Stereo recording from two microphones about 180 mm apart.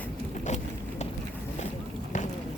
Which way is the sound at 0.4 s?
40° left (ahead or behind).